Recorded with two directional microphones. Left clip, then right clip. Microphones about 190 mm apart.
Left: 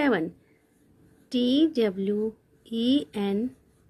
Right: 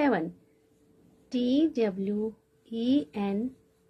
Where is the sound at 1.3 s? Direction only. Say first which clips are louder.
Left 3 dB; 30° left (ahead or behind).